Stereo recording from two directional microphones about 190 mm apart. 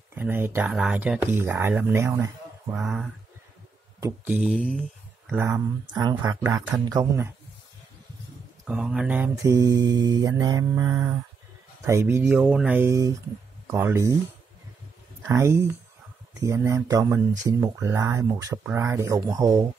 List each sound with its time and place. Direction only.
0.1 s speech: 10° right (ahead or behind)
5.5 s speech: 20° right (ahead or behind)
8.6 s speech: 5° right (ahead or behind)
15.2 s speech: 15° right (ahead or behind)